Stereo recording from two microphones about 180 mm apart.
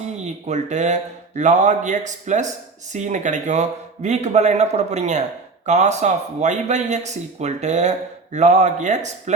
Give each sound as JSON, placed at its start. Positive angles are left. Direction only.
{"t": 0.2, "sound": "speech", "side_deg": -40}